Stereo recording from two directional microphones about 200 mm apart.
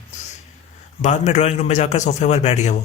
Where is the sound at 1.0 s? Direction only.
35° left (ahead or behind).